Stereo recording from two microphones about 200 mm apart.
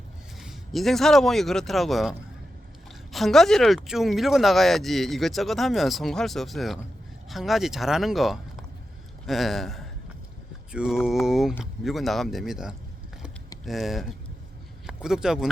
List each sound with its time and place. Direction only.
0.3 s a man's voice: centre (ahead or behind)